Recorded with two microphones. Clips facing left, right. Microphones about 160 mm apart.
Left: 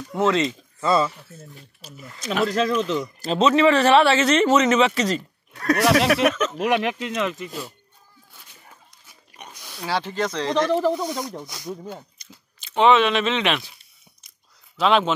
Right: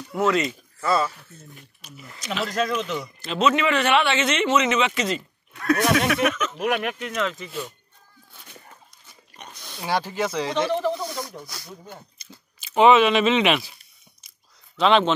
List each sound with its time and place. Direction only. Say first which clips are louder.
0.1 s a man's voice: left 1 dB; 25° left (ahead or behind)
9.4 s pig: even; 10° left (ahead or behind)
9.8 s speech: even; 10° right (ahead or behind)
11.1 s speech: left 4 dB; 15° left (ahead or behind)
12.2 s speech: right 1 dB; 5° right (ahead or behind)
14.8 s speech: right 1 dB; 5° left (ahead or behind)